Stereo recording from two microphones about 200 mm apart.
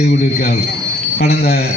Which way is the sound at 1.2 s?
55° left (ahead or behind).